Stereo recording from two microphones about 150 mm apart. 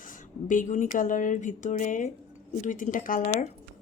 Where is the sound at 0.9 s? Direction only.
65° left (ahead or behind).